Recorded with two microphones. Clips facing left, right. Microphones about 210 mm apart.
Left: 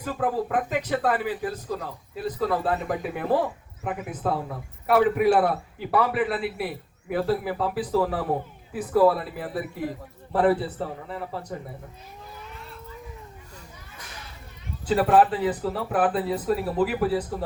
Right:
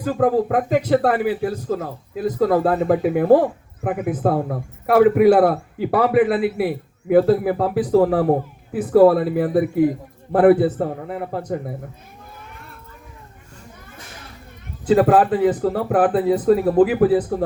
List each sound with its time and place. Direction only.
0.1 s a man's voice: 45° right (ahead or behind)
14.9 s speech: 50° right (ahead or behind)